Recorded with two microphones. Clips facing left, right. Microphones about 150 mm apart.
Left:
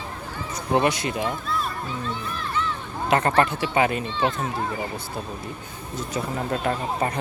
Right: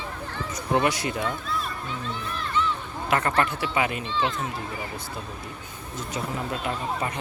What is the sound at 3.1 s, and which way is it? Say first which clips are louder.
Speech: left 4 dB; 25° left (ahead or behind).